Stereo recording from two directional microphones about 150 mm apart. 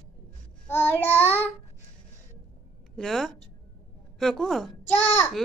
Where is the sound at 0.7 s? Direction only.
15° left (ahead or behind).